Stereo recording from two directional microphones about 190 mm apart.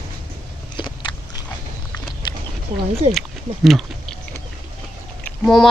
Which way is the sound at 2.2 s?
25° left (ahead or behind).